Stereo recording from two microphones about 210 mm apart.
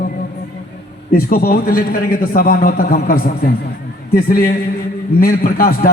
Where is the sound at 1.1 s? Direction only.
45° left (ahead or behind).